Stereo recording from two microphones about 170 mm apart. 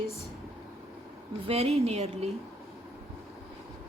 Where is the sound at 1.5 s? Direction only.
35° right (ahead or behind).